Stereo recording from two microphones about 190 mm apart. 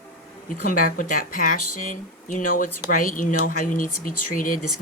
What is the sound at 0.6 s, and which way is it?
A man's voice, 45° left (ahead or behind).